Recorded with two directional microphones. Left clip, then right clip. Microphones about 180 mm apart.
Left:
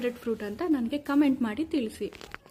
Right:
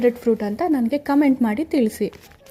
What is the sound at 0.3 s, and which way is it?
A woman's voice, 25° right (ahead or behind).